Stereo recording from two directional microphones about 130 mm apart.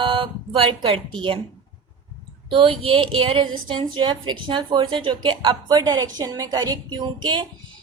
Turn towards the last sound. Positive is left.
turn(degrees=-35)  # may be behind; listen again after turning